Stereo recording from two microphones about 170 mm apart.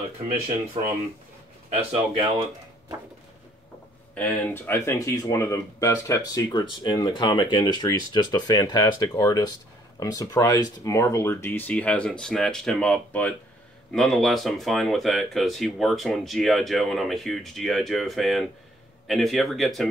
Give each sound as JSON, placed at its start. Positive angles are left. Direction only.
{"t": 0.8, "sound": "speech", "side_deg": -35}
{"t": 4.1, "sound": "speech", "side_deg": 10}